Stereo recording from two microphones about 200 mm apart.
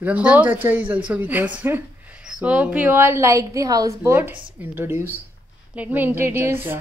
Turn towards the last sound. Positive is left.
turn(degrees=-10)  # may be behind; listen again after turning